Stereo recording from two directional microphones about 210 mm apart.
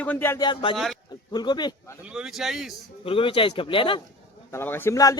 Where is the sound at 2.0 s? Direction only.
5° right (ahead or behind).